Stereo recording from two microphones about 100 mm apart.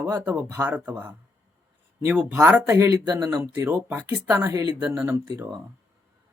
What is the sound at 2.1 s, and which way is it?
Speech, 15° right (ahead or behind).